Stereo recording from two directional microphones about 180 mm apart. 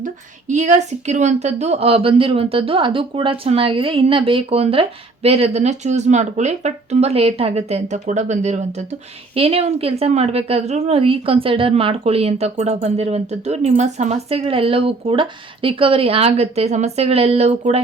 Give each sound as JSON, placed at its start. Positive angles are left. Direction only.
{"t": 0.0, "sound": "speech", "side_deg": -40}